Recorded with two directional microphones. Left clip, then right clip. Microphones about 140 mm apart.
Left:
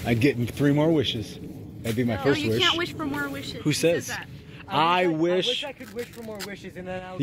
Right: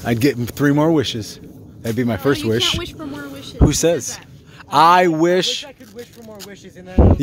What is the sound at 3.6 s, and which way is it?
Speech, 35° right (ahead or behind).